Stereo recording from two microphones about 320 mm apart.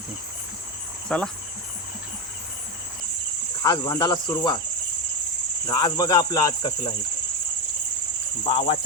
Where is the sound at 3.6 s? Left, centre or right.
Centre.